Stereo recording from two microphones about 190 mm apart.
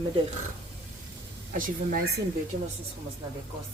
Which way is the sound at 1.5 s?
45° right (ahead or behind).